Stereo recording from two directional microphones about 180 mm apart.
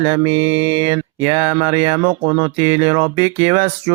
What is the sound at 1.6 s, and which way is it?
Speech, 30° right (ahead or behind).